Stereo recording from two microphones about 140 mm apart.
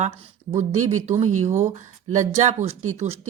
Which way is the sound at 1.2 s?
55° right (ahead or behind).